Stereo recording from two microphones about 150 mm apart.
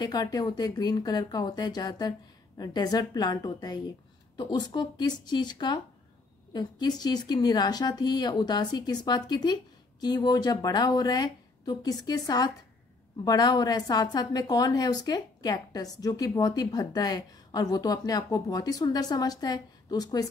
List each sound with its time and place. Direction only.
0.0 s a woman's voice: 25° left (ahead or behind)